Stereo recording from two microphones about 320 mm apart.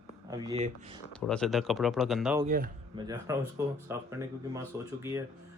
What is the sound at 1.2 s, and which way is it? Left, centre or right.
Speech, centre.